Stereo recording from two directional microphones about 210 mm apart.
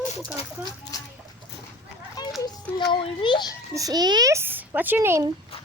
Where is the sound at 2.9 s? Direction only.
20° left (ahead or behind).